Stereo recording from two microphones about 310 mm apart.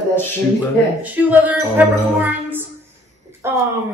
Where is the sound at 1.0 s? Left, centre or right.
Centre.